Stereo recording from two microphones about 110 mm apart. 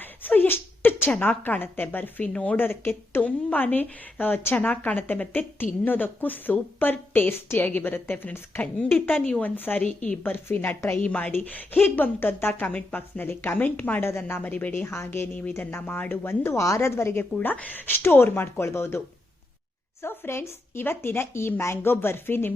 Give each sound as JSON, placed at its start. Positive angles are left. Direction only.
{"t": 0.0, "sound": "a woman's voice", "side_deg": 15}